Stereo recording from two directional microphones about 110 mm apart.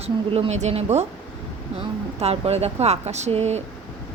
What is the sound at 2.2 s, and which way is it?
Speech, 70° right (ahead or behind).